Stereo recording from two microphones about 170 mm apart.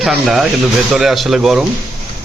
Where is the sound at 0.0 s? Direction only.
Centre (ahead or behind).